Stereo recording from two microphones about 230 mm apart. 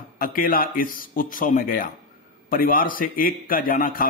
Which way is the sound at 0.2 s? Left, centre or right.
Left.